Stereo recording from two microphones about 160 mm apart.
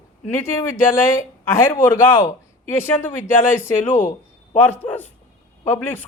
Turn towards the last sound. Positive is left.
turn(degrees=10)  # may be behind; listen again after turning